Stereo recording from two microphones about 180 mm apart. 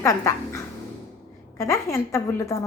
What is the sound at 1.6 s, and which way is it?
Speech, 15° left (ahead or behind).